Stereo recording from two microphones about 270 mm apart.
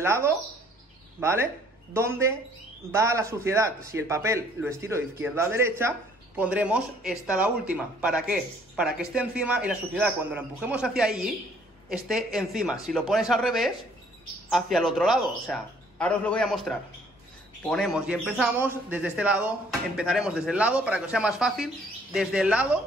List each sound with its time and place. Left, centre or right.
0.0 s a man's voice: centre